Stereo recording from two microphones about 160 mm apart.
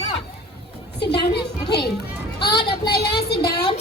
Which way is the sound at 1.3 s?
90° left.